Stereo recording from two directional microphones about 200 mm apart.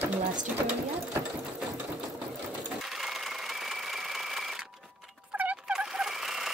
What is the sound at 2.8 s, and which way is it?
Sewing machine, centre (ahead or behind).